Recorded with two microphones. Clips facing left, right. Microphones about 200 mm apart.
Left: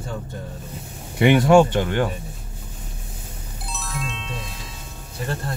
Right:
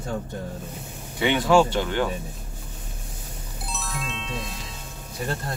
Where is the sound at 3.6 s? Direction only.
Centre (ahead or behind).